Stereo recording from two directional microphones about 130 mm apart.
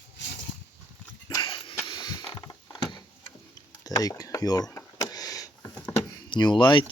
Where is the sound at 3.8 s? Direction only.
25° left (ahead or behind).